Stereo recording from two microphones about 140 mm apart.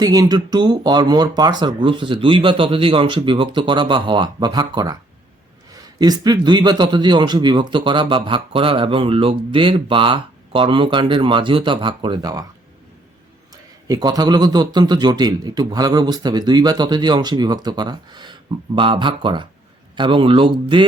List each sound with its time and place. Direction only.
0.0 s a man's voice: 25° right (ahead or behind)
13.5 s a man's voice: 25° right (ahead or behind)